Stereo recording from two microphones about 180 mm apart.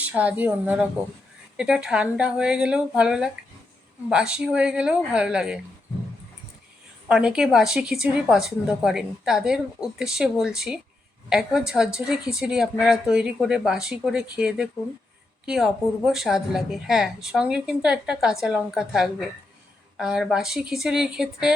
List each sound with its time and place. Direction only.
0.0 s a woman's voice: 10° right (ahead or behind)
7.1 s speech: 5° right (ahead or behind)